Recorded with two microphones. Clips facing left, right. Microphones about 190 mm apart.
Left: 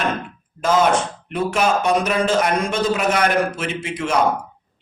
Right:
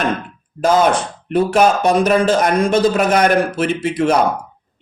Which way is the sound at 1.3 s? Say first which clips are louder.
Right 6 dB; 35° right (ahead or behind).